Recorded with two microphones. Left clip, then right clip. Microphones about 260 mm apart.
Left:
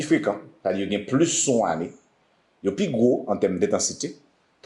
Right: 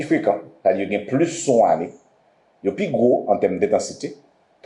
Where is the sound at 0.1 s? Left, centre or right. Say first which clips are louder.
Right 4 dB; left.